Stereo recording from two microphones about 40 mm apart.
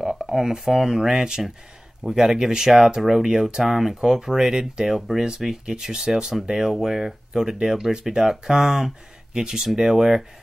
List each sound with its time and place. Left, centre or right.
0.0 s speech: centre
4.9 s speech: centre